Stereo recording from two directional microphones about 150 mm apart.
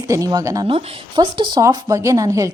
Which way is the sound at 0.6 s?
35° right (ahead or behind).